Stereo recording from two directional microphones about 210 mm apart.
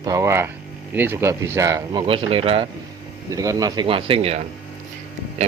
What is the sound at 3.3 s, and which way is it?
Speech, 15° right (ahead or behind).